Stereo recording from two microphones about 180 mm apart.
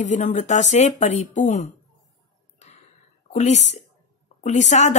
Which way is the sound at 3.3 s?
40° left (ahead or behind).